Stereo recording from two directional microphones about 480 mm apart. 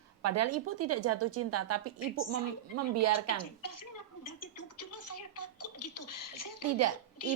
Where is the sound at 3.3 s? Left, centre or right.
Left.